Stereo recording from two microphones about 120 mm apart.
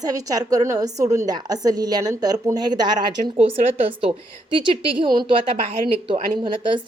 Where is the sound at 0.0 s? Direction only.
30° right (ahead or behind).